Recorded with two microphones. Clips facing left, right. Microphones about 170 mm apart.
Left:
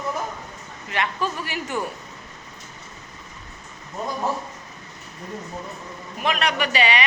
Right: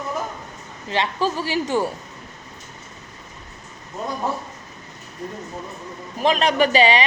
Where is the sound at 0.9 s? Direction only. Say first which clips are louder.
Right 4 dB; 30° right (ahead or behind).